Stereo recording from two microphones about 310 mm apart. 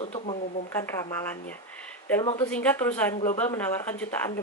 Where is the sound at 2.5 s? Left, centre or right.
Centre.